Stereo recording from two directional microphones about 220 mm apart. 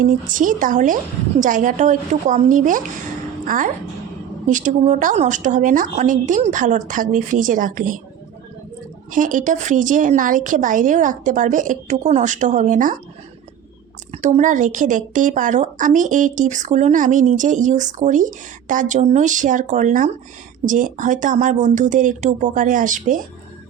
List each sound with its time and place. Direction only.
0.0 s a woman's voice: 35° right (ahead or behind)
9.1 s a woman's voice: 35° right (ahead or behind)
14.1 s a woman's voice: 30° right (ahead or behind)